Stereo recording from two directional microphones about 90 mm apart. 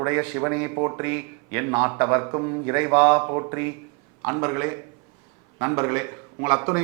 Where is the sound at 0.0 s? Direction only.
20° right (ahead or behind).